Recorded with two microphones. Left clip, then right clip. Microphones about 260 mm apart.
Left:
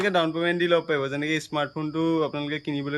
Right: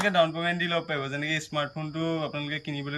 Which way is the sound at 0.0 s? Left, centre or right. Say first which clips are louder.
Left 1 dB; centre.